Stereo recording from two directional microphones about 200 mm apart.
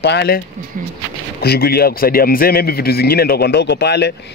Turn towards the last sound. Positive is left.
turn(degrees=55)  # may be behind; listen again after turning